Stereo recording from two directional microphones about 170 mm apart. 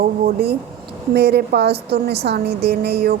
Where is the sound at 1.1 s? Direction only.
70° right (ahead or behind).